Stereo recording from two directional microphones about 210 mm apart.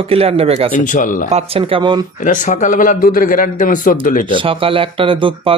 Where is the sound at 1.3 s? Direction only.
25° right (ahead or behind).